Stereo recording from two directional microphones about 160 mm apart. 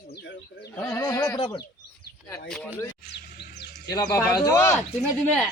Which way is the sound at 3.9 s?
25° left (ahead or behind).